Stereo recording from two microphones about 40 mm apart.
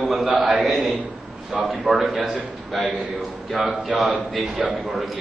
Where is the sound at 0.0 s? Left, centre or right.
Centre.